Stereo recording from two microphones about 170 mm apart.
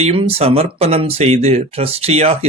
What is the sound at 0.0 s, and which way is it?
Speech, 35° right (ahead or behind).